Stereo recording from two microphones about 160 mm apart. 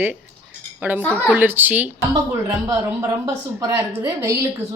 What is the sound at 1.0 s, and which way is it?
Speech, 10° left (ahead or behind).